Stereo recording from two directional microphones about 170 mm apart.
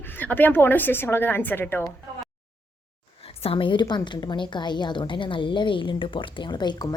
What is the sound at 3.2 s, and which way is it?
A woman's voice, 35° left (ahead or behind).